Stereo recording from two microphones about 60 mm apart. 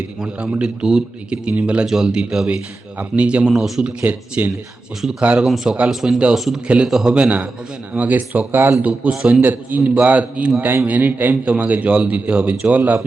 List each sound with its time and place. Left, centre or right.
0.2 s a man's voice: centre
4.0 s a man's voice: right
5.9 s a man's voice: centre; by 8.7 s right
8.8 s a man's voice: centre